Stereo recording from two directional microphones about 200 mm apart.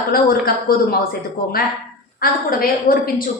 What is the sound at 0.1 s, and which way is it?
Speech, 45° left (ahead or behind).